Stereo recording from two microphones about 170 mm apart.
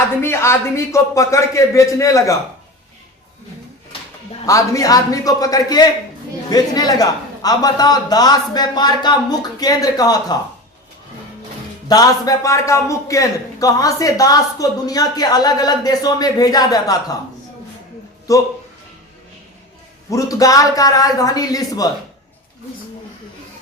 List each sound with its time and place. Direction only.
0.2 s a man's voice: 15° left (ahead or behind)
4.4 s a man's voice: 20° left (ahead or behind)
11.9 s a man's voice: 20° left (ahead or behind)
18.3 s a man's voice: 20° left (ahead or behind)
20.1 s a man's voice: 20° left (ahead or behind)